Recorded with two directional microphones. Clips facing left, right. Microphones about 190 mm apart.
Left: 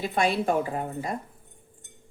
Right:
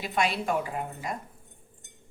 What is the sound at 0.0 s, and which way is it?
Speech, 30° left (ahead or behind).